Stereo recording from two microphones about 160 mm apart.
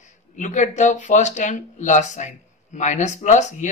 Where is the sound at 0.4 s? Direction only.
50° left (ahead or behind).